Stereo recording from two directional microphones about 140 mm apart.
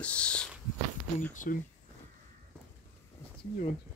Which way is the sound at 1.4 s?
65° left (ahead or behind).